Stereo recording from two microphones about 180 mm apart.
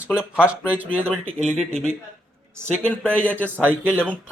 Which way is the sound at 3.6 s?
10° right (ahead or behind).